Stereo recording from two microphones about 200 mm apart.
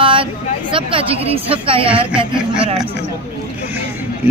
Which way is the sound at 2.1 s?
5° right (ahead or behind).